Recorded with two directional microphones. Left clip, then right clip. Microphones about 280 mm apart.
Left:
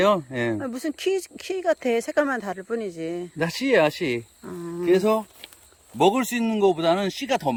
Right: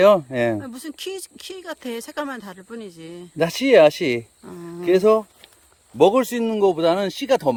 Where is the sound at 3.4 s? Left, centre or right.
Right.